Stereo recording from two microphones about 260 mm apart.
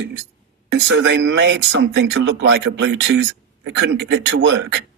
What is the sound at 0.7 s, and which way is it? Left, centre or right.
A man's voice, right.